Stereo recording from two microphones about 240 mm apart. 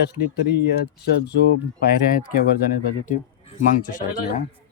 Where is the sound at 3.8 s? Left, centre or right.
Left.